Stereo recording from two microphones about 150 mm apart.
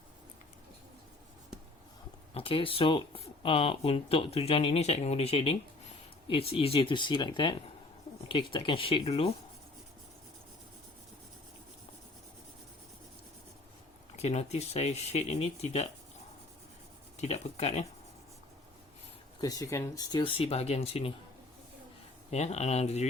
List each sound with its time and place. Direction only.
2.3 s speech: 35° left (ahead or behind)
14.2 s speech: 45° left (ahead or behind)
17.2 s speech: 45° left (ahead or behind)
19.4 s speech: 25° left (ahead or behind); by 21.1 s 40° left (ahead or behind)
22.3 s speech: 45° left (ahead or behind)